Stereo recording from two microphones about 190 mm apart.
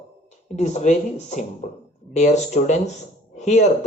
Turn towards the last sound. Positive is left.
turn(degrees=40)  # may be behind; listen again after turning